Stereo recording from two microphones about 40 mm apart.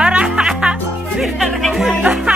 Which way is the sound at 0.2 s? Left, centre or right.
Centre.